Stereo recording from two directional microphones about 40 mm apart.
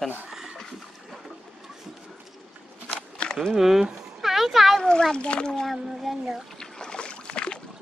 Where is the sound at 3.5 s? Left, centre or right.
Centre.